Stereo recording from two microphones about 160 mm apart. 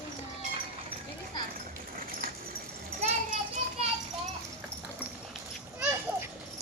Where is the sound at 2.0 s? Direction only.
65° right (ahead or behind).